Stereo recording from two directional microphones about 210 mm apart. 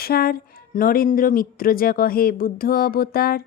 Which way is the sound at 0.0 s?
45° left (ahead or behind).